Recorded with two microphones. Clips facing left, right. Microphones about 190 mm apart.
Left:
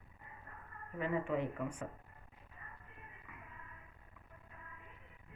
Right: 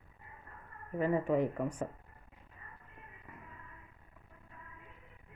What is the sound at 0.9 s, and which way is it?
Speech, 40° right (ahead or behind).